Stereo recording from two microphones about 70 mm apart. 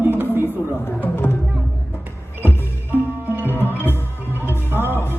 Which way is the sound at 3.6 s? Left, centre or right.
Left.